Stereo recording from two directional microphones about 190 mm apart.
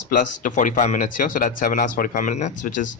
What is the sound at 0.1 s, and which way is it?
Speech, 45° left (ahead or behind).